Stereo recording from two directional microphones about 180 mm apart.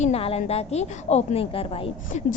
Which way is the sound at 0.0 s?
35° left (ahead or behind).